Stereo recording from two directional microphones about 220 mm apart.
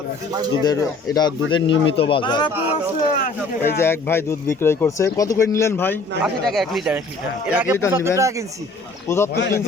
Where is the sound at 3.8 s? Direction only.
10° left (ahead or behind).